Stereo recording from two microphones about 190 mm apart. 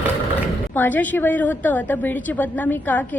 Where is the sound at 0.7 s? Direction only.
10° left (ahead or behind).